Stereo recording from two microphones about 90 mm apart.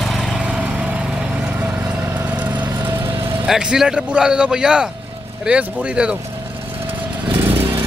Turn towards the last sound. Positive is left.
turn(degrees=-10)  # may be behind; listen again after turning